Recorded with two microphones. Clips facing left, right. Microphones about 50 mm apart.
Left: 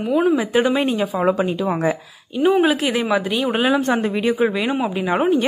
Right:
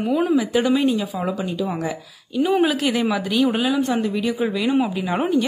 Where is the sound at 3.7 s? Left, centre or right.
Left.